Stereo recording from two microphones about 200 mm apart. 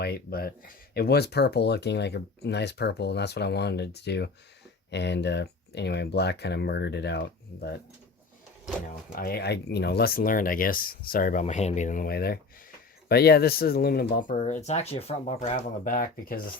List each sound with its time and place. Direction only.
0.0 s speech: 50° left (ahead or behind)
9.1 s speech: 50° left (ahead or behind)